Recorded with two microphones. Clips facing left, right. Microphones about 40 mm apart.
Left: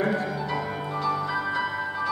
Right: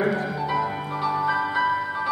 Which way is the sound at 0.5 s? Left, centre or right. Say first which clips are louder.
Right 4 dB; centre.